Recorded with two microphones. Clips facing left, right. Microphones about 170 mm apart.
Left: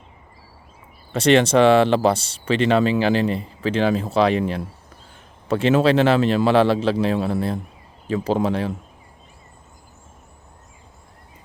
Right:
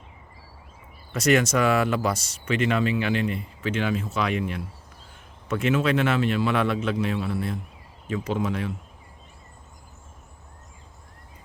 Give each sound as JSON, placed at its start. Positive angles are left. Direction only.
{"t": 1.1, "sound": "speech", "side_deg": 30}